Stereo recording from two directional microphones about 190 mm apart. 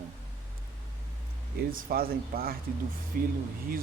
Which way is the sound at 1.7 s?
50° right (ahead or behind).